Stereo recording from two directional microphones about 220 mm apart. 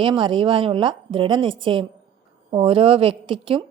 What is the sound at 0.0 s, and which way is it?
A woman's voice, 25° right (ahead or behind).